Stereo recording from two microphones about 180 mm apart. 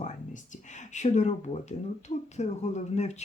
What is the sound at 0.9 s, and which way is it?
Speech, 40° left (ahead or behind).